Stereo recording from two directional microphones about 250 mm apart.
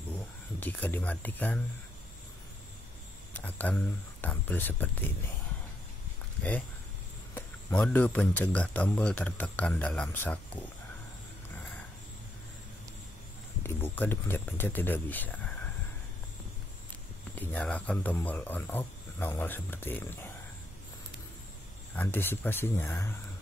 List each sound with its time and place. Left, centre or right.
0.1 s speech: centre
3.3 s speech: centre
7.3 s speech: centre
13.6 s speech: centre
17.4 s speech: centre
21.9 s speech: centre